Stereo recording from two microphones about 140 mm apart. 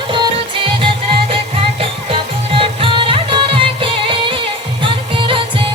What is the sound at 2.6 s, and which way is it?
Music, 40° right (ahead or behind).